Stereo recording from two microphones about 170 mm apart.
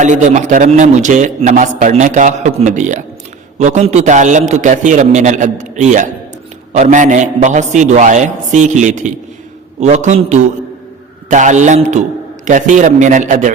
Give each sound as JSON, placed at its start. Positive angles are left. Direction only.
{"t": 0.0, "sound": "a man's voice", "side_deg": -45}